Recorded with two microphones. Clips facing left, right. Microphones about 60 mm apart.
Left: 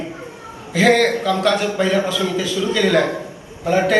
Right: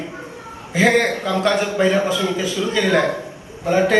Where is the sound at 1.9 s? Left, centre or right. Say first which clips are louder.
Right 1 dB; right.